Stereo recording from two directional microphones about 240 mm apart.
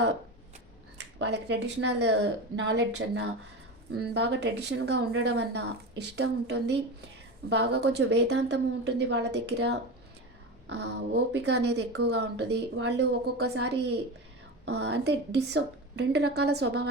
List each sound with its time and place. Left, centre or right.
0.9 s speech: right